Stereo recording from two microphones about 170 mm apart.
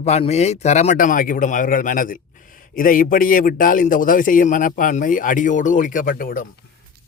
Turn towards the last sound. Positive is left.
turn(degrees=55)  # may be behind; listen again after turning